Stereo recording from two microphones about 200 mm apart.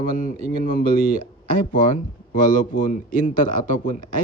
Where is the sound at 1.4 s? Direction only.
45° left (ahead or behind).